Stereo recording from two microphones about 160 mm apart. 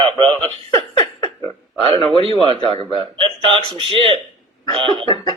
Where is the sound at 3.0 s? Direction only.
35° right (ahead or behind).